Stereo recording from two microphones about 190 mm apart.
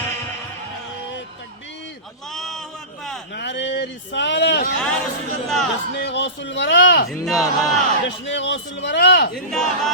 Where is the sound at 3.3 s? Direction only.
70° left (ahead or behind).